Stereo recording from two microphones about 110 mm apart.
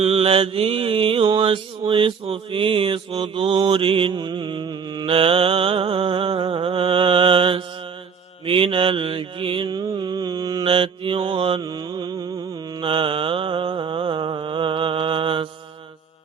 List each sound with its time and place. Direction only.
0.0 s mantra: 65° right (ahead or behind); by 5.0 s 40° right (ahead or behind)
5.0 s mantra: 55° right (ahead or behind); by 10.7 s 35° right (ahead or behind)
10.7 s mantra: 55° right (ahead or behind)
11.6 s mantra: 40° right (ahead or behind)
12.8 s mantra: 50° right (ahead or behind)